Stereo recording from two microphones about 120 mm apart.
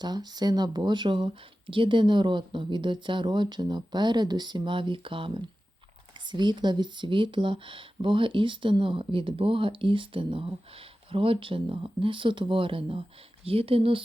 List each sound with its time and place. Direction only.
0.0 s speech: 35° right (ahead or behind); by 14.0 s 50° right (ahead or behind)